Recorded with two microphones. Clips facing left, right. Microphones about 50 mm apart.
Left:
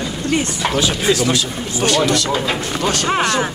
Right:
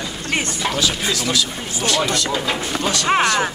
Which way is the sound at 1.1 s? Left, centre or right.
Left.